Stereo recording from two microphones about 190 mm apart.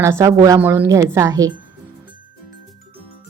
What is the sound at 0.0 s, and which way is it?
A woman's voice, 15° right (ahead or behind).